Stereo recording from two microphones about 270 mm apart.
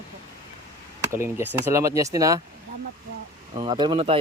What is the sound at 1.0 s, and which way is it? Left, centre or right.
Speech, centre.